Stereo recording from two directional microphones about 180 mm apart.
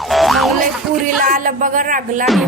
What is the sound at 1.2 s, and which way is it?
Speech, 50° right (ahead or behind).